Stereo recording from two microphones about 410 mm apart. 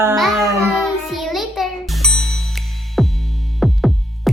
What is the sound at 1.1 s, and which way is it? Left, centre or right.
Music, centre.